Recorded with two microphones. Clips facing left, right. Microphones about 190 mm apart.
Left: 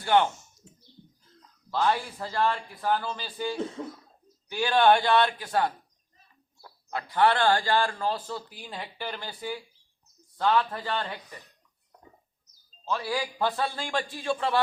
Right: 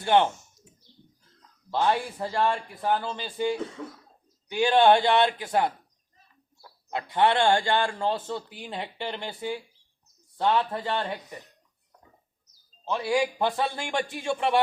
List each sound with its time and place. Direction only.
0.0 s a sound: 20° right (ahead or behind)
1.7 s a man's voice: 25° right (ahead or behind)
6.9 s a man's voice: 20° right (ahead or behind)
12.8 s a man's voice: 20° right (ahead or behind)